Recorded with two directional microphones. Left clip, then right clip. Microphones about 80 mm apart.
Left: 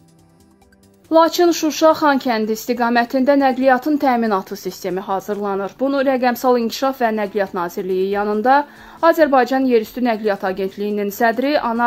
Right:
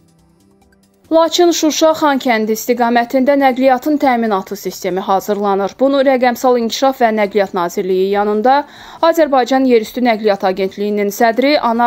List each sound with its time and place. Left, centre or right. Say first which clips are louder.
1.1 s speech: right 2 dB; right
4.9 s speech: right 8 dB; right
5.9 s speech: right 5 dB; right
8.0 s speech: right 5 dB; centre